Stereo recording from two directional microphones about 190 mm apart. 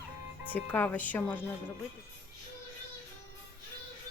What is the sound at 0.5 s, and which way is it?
Speech, 10° left (ahead or behind).